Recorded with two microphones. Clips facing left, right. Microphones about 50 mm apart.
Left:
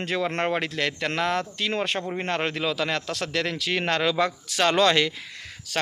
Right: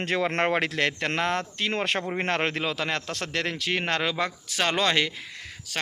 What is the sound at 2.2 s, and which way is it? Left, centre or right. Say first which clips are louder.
Speech: right 1 dB; right.